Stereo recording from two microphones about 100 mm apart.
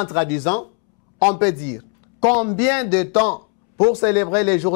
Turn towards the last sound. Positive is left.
turn(degrees=15)  # may be behind; listen again after turning